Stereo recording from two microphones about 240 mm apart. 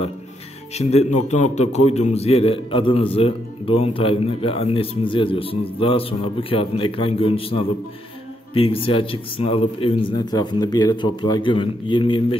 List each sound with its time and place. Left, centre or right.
0.7 s a man's voice: left